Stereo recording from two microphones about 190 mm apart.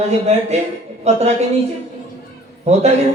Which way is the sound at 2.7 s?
35° right (ahead or behind).